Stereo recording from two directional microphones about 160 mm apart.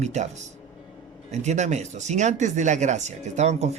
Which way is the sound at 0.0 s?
45° right (ahead or behind).